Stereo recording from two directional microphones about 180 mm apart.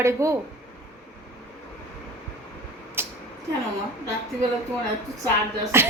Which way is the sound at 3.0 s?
15° right (ahead or behind).